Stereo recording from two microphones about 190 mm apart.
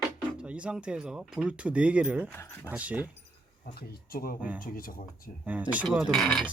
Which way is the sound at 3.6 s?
55° left (ahead or behind).